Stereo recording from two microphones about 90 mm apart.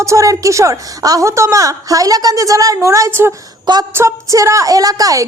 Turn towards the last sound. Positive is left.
turn(degrees=-40)  # may be behind; listen again after turning